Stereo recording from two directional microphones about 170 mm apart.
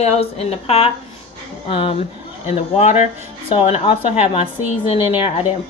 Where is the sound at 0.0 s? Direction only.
40° left (ahead or behind).